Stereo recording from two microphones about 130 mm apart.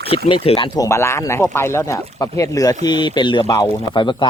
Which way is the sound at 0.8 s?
20° left (ahead or behind).